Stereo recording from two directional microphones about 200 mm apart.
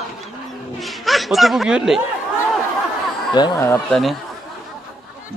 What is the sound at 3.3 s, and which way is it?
Speech, 20° left (ahead or behind).